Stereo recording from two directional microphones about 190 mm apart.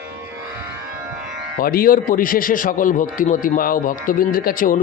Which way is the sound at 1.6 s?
50° left (ahead or behind).